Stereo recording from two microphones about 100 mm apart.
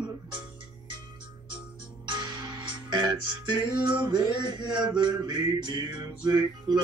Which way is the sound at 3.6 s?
45° right (ahead or behind).